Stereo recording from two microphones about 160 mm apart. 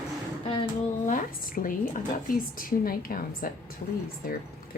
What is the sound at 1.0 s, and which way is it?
A woman's voice, 55° left (ahead or behind).